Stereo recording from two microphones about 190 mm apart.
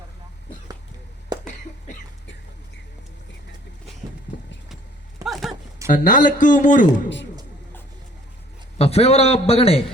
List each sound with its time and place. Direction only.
5.2 s horse: centre (ahead or behind)
5.9 s speech: 45° left (ahead or behind)
8.8 s a man's voice: 35° left (ahead or behind)